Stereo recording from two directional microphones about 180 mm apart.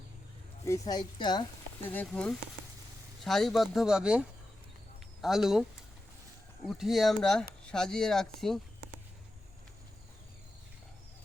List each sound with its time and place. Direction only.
0.6 s speech: 20° left (ahead or behind)
1.8 s speech: 10° left (ahead or behind)
6.7 s speech: centre (ahead or behind)